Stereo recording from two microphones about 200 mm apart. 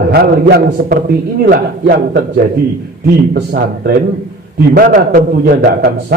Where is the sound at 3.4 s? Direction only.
55° right (ahead or behind).